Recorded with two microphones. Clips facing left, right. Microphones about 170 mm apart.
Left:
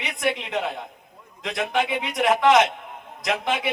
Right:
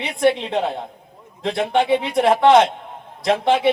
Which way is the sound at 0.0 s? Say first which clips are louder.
Right 8 dB; 30° right (ahead or behind).